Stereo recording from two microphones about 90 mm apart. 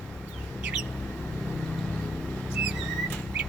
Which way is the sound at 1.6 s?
5° left (ahead or behind).